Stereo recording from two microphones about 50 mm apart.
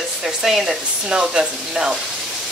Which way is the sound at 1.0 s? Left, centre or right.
Centre.